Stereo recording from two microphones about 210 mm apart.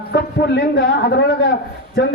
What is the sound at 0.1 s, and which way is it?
A man's voice, 50° left (ahead or behind).